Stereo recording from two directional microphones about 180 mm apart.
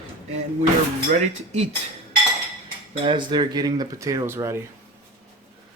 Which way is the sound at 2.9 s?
30° right (ahead or behind).